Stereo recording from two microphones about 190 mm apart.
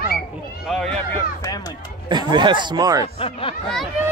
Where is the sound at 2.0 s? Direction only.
25° right (ahead or behind).